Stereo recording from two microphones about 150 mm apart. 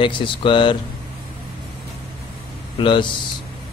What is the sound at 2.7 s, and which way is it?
Speech, 35° left (ahead or behind).